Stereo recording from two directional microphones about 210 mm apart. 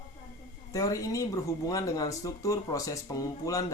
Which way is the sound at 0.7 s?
15° left (ahead or behind).